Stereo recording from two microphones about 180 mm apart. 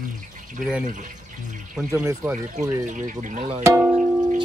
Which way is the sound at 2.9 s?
45° right (ahead or behind).